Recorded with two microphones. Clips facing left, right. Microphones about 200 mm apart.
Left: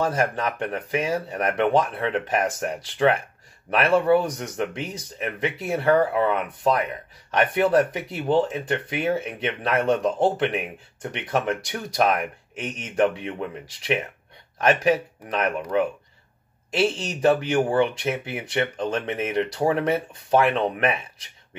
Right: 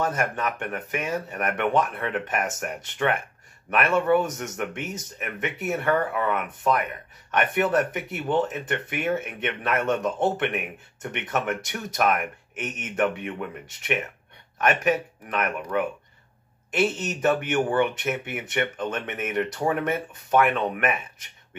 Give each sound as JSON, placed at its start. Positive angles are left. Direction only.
{"t": 0.0, "sound": "speech", "side_deg": 30}
{"t": 16.9, "sound": "speech", "side_deg": 30}